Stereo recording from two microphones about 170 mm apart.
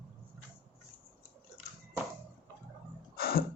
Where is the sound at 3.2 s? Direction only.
60° left (ahead or behind).